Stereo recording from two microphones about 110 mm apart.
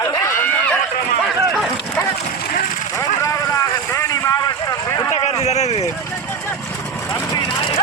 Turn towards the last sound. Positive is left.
turn(degrees=35)  # may be behind; listen again after turning